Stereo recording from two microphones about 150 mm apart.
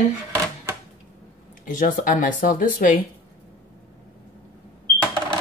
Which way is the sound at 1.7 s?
65° left (ahead or behind).